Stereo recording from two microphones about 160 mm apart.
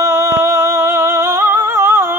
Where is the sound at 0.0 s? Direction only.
20° right (ahead or behind).